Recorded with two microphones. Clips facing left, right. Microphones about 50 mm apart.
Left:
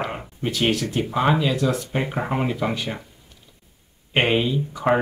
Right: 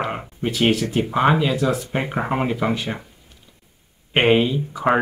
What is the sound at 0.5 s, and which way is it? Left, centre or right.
Speech, centre.